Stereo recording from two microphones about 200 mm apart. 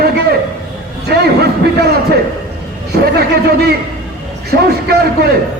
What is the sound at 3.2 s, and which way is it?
A man's voice, 50° right (ahead or behind).